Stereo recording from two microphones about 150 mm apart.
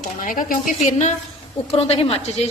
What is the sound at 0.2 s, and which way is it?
A woman's voice, 65° left (ahead or behind).